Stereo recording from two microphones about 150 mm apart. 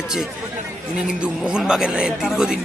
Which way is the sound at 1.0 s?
5° right (ahead or behind).